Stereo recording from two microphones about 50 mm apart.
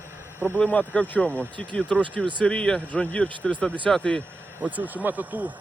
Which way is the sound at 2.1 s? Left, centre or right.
Left.